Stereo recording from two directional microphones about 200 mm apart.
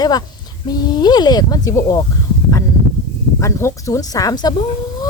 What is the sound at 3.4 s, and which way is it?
A woman's voice, 15° left (ahead or behind).